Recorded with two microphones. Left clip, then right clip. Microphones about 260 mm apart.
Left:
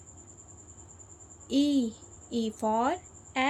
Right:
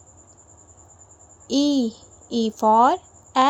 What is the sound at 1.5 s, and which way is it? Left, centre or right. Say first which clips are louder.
Speech: right 6 dB; centre.